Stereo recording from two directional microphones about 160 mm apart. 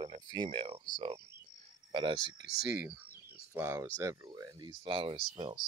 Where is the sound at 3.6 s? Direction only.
15° right (ahead or behind); by 5.6 s 35° right (ahead or behind).